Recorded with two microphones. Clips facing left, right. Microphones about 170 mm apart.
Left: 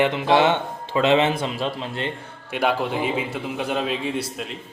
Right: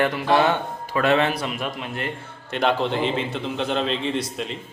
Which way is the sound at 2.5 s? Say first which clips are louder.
Right 1 dB; 10° left (ahead or behind).